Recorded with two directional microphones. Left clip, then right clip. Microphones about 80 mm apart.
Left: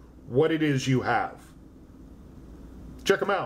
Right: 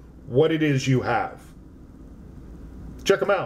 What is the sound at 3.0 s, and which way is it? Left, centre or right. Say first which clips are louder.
Speech: right 4 dB; centre.